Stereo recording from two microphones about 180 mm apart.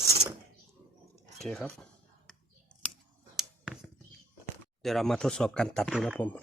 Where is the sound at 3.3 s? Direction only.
Centre (ahead or behind).